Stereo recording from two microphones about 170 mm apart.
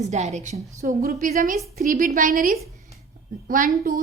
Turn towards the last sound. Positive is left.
turn(degrees=-50)  # may be behind; listen again after turning